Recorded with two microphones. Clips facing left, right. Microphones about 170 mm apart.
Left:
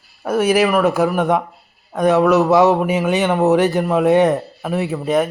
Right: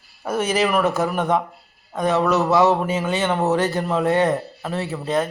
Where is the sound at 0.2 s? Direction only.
5° left (ahead or behind).